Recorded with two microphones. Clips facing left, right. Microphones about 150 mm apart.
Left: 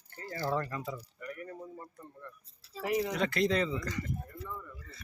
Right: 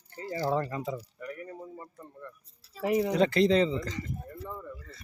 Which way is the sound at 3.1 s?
30° right (ahead or behind).